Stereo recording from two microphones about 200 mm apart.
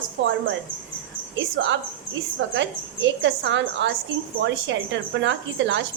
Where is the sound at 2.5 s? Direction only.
65° right (ahead or behind).